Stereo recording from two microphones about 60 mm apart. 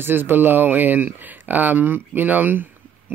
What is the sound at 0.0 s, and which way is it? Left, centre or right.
Speech, right.